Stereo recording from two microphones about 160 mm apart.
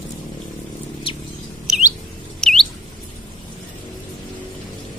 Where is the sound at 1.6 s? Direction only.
5° right (ahead or behind).